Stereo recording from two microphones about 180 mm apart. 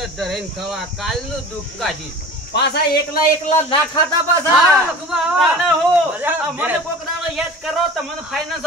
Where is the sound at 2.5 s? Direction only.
70° left (ahead or behind).